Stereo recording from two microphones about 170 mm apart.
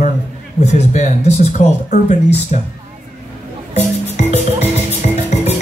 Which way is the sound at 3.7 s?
40° left (ahead or behind).